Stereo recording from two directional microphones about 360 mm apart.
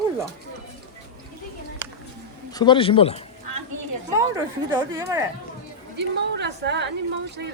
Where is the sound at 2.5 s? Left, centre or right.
Centre.